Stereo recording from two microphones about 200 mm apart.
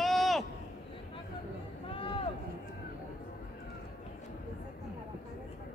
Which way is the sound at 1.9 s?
25° left (ahead or behind).